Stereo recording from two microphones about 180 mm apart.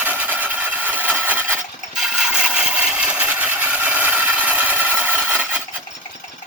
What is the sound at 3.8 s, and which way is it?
Tools, 10° right (ahead or behind).